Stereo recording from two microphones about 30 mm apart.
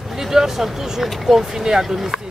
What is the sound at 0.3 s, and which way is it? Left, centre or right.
Speech, centre.